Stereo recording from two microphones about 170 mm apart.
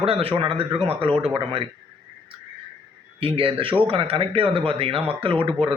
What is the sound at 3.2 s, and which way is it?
Speech, 30° right (ahead or behind).